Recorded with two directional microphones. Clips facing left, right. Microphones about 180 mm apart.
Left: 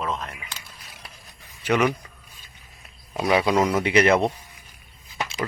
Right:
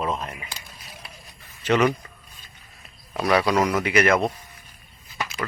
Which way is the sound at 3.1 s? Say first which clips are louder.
Even; 15° left (ahead or behind).